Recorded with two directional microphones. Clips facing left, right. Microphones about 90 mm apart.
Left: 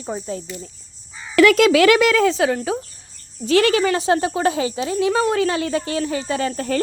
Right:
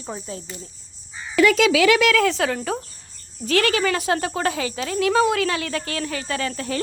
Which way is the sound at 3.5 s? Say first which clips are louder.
Left 4 dB; 30° left (ahead or behind).